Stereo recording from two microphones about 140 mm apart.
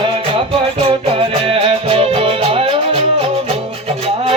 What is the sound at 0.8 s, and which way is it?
Music, 40° right (ahead or behind).